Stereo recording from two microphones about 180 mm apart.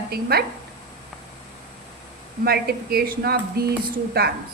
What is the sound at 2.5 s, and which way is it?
Speech, 60° right (ahead or behind).